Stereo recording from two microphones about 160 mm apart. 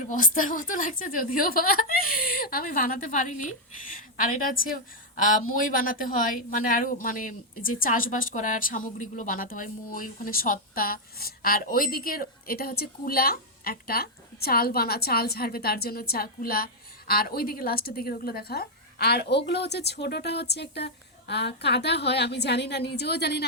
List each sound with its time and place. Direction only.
0.0 s a woman's voice: 55° left (ahead or behind); by 23.5 s 90° left